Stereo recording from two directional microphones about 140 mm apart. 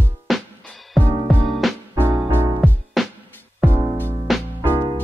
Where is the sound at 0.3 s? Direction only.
5° left (ahead or behind).